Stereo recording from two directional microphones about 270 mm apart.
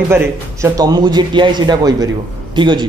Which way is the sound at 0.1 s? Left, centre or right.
Centre.